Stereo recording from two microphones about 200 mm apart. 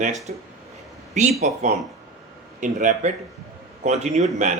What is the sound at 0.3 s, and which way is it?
Speech, 40° right (ahead or behind).